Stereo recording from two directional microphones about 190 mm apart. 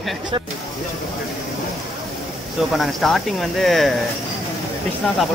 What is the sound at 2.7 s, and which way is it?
Speech, centre (ahead or behind).